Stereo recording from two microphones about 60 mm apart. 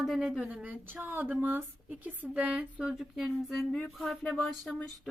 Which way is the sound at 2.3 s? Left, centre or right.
Centre.